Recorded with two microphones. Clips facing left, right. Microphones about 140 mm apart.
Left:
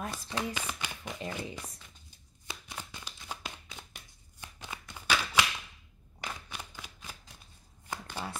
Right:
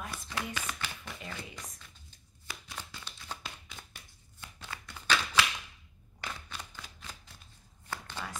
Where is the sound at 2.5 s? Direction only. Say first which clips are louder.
Left 1 dB; 25° left (ahead or behind).